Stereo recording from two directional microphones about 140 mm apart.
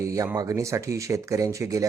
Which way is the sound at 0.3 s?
25° right (ahead or behind).